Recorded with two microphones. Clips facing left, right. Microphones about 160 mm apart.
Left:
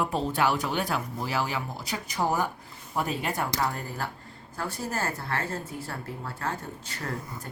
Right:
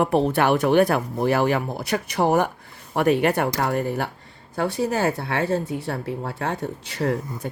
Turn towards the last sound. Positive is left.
turn(degrees=-70)  # may be behind; listen again after turning